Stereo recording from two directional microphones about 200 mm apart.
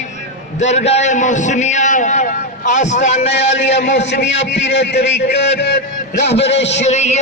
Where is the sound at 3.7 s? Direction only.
60° left (ahead or behind).